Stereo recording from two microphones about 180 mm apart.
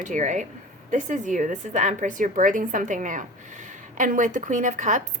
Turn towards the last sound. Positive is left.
turn(degrees=-45)  # may be behind; listen again after turning